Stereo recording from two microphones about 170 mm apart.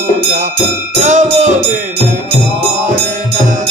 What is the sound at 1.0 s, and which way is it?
Music, 45° right (ahead or behind).